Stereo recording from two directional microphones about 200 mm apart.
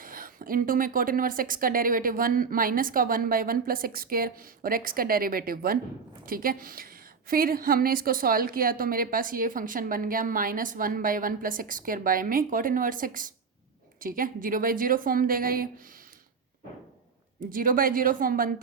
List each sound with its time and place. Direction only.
0.0 s a woman's voice: 45° right (ahead or behind)
17.5 s a woman's voice: 45° right (ahead or behind)